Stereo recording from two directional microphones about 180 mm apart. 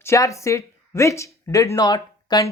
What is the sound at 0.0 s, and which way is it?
Speech, 15° left (ahead or behind).